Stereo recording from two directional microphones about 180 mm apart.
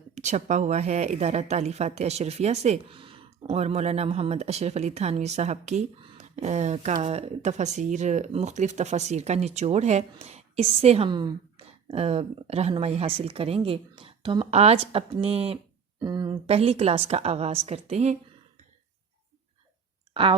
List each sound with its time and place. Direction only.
0.1 s speech: 40° right (ahead or behind)
16.0 s a sound: 25° right (ahead or behind)
16.5 s speech: 35° right (ahead or behind)